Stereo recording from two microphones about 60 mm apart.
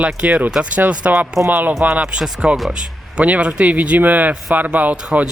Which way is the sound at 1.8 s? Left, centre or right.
Centre.